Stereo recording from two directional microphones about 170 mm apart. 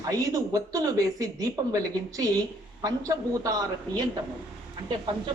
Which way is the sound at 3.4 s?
20° right (ahead or behind).